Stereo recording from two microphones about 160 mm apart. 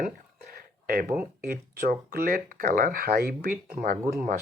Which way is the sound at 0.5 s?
70° right (ahead or behind).